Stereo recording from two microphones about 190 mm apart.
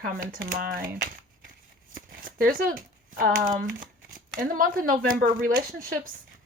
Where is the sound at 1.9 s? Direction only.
50° right (ahead or behind).